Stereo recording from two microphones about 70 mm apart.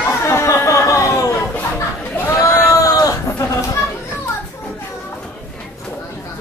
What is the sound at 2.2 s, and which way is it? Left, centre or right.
Sheep, left.